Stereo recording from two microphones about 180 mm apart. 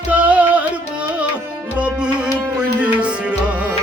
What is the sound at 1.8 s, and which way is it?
Tabla, 5° right (ahead or behind).